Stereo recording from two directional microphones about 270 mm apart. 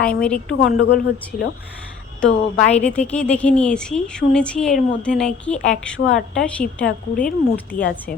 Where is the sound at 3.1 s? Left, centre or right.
Centre.